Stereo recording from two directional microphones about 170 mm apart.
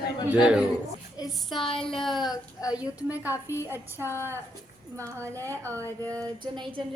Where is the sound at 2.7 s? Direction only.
10° right (ahead or behind).